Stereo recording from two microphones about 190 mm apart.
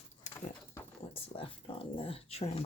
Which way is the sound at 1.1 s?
30° left (ahead or behind).